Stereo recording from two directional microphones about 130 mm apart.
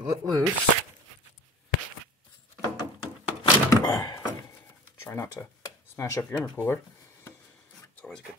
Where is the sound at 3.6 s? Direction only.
30° left (ahead or behind).